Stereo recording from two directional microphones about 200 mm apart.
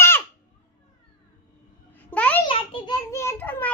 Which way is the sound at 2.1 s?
5° left (ahead or behind).